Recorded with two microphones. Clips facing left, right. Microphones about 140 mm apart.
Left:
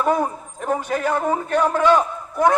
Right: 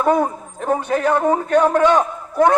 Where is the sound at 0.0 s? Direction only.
15° right (ahead or behind).